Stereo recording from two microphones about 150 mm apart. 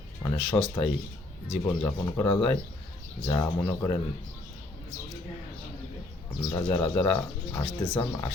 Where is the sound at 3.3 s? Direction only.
15° left (ahead or behind).